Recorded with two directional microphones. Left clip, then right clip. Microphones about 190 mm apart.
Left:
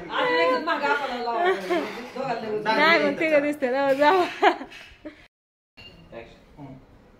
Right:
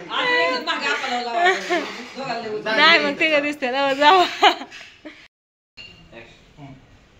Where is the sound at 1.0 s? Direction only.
15° left (ahead or behind).